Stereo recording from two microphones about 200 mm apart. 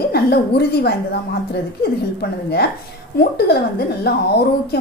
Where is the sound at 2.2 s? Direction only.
55° left (ahead or behind).